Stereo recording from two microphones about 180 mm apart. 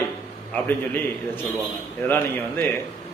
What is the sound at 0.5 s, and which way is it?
Speech, 10° left (ahead or behind).